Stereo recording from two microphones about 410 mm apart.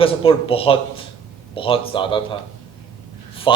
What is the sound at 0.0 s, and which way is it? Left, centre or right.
A man's voice, centre.